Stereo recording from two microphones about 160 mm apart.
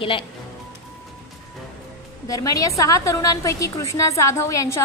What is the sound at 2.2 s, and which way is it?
A woman's voice, 20° left (ahead or behind).